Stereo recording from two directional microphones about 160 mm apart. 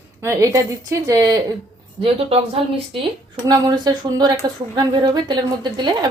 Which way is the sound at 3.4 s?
25° right (ahead or behind).